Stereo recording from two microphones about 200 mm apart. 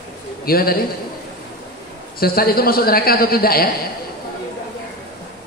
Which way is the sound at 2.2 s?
50° left (ahead or behind).